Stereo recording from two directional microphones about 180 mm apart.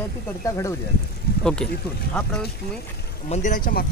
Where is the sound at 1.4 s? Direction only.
5° left (ahead or behind).